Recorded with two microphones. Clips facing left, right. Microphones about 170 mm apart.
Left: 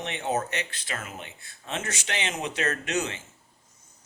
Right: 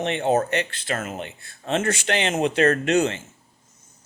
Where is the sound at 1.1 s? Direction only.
70° right (ahead or behind).